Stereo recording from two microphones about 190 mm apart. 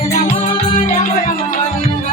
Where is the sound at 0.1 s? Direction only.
40° left (ahead or behind).